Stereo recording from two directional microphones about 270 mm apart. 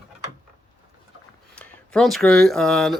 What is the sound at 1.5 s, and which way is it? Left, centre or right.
Speech, centre.